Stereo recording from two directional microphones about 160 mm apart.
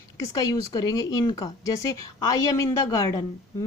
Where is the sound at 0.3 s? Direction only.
25° left (ahead or behind).